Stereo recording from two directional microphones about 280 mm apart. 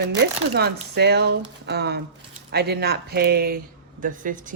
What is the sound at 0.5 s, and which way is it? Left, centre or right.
Speech, right.